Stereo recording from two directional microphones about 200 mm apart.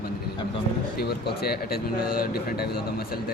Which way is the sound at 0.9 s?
55° left (ahead or behind).